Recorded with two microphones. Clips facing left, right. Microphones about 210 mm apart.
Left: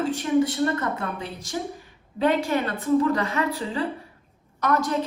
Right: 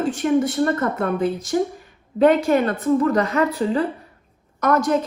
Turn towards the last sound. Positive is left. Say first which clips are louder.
# right 5 dB
turn(degrees=-45)  # may be behind; listen again after turning